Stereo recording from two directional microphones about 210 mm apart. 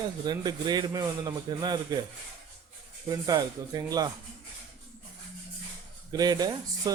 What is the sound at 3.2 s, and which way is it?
Speech, 15° right (ahead or behind).